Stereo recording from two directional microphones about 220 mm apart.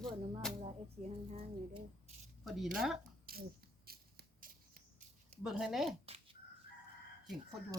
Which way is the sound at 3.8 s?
45° right (ahead or behind).